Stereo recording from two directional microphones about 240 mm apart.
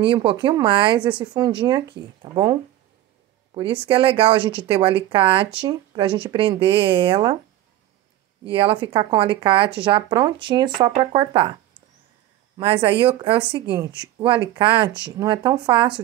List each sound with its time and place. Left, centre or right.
0.0 s speech: right
3.5 s speech: right
8.5 s speech: right
12.5 s speech: right